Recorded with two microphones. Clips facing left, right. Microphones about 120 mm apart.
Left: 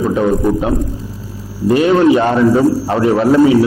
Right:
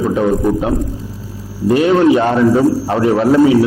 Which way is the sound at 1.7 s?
15° left (ahead or behind).